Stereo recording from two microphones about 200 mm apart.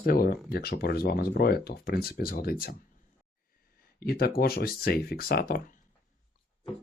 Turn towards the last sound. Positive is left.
turn(degrees=50)  # may be behind; listen again after turning